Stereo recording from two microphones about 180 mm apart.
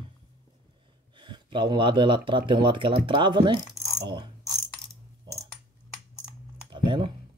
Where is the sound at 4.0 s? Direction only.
25° right (ahead or behind).